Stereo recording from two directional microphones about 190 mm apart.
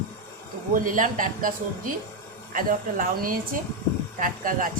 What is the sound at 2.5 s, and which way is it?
A woman's voice, 45° right (ahead or behind).